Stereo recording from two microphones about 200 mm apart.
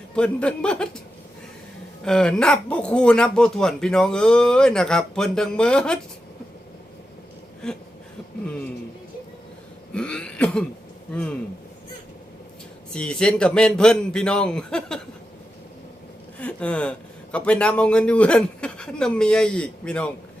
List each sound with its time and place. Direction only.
0.2 s speech: 5° left (ahead or behind)
2.0 s speech: 5° left (ahead or behind)
9.9 s speech: 5° left (ahead or behind)
12.9 s speech: 5° left (ahead or behind)
16.4 s speech: 5° left (ahead or behind)